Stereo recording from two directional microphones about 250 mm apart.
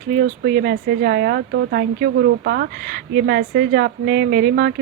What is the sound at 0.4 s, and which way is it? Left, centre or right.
A woman's voice, right.